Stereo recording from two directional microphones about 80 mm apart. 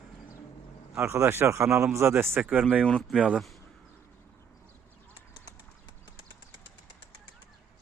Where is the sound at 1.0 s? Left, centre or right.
Right.